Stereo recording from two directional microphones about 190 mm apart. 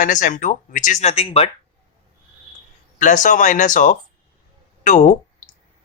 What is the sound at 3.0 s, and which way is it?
Speech, 40° left (ahead or behind).